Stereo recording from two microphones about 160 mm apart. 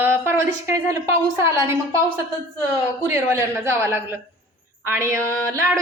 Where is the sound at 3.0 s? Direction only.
15° right (ahead or behind).